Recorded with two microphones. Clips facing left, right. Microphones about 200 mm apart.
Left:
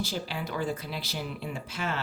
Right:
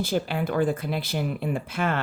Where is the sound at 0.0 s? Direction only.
55° right (ahead or behind).